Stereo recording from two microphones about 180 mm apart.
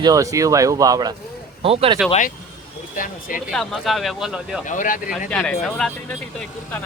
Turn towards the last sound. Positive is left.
turn(degrees=5)  # may be behind; listen again after turning